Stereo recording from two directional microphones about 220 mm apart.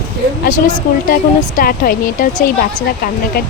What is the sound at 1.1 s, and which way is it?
Speech, 40° left (ahead or behind).